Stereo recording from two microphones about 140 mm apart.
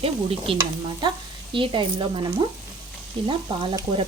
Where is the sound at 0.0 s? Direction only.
45° right (ahead or behind).